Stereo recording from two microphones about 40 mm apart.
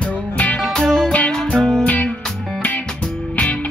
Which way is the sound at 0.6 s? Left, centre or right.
Centre.